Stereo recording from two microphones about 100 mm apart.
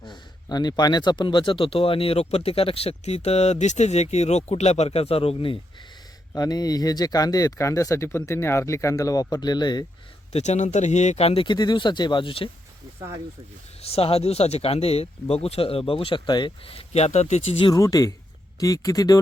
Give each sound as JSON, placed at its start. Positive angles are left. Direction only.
{"t": 0.0, "sound": "speech", "side_deg": 45}
{"t": 6.3, "sound": "speech", "side_deg": 40}
{"t": 11.2, "sound": "speech", "side_deg": 90}
{"t": 11.4, "sound": "speech", "side_deg": 45}
{"t": 13.8, "sound": "speech", "side_deg": 85}
{"t": 16.6, "sound": "speech", "side_deg": 85}
{"t": 17.7, "sound": "speech", "side_deg": 35}